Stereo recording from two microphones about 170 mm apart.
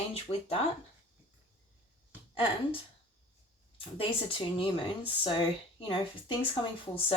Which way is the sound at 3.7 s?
30° left (ahead or behind).